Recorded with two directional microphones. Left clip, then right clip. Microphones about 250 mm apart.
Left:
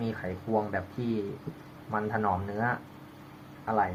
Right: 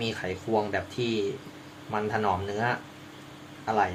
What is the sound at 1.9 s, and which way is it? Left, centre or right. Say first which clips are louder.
Speech: right 2 dB; right.